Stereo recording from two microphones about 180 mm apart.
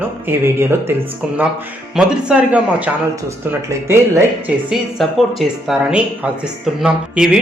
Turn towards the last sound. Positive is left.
turn(degrees=-5)  # may be behind; listen again after turning